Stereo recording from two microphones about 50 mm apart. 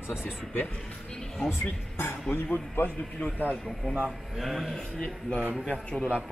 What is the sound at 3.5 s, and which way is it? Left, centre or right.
Speech, centre.